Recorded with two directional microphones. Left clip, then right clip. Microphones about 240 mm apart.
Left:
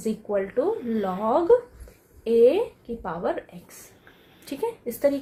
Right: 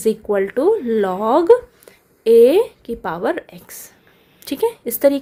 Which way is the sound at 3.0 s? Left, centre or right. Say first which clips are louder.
Right 7 dB; right.